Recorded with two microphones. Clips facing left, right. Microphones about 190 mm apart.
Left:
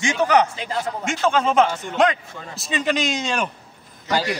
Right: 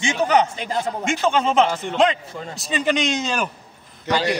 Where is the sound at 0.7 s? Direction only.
25° right (ahead or behind).